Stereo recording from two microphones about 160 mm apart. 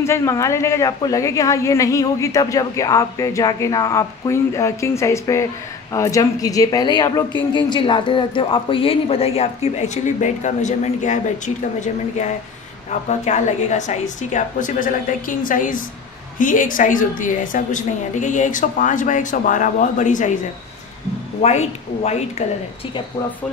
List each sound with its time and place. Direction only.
0.0 s a woman's voice: 20° left (ahead or behind); by 20.3 s 50° left (ahead or behind)
21.4 s a woman's voice: 45° left (ahead or behind)